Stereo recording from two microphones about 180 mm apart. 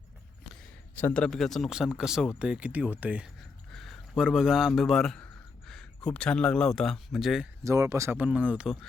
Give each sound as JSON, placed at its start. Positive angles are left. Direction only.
{"t": 1.0, "sound": "speech", "side_deg": 5}
{"t": 7.6, "sound": "speech", "side_deg": -15}